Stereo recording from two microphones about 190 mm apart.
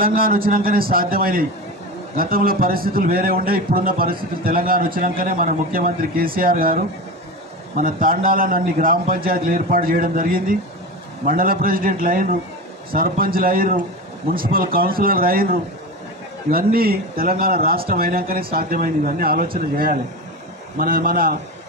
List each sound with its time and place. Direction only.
0.0 s a man's voice: 50° right (ahead or behind)
16.4 s a man's voice: 50° right (ahead or behind)